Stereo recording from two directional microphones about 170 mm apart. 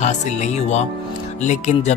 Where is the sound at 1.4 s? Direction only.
45° left (ahead or behind).